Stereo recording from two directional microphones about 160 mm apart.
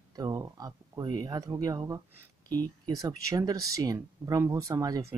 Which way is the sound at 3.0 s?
20° right (ahead or behind).